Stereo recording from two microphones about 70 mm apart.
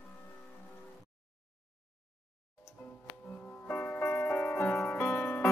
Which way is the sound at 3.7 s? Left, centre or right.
Left.